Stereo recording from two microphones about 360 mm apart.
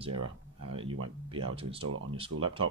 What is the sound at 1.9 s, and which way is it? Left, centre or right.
Speech, right.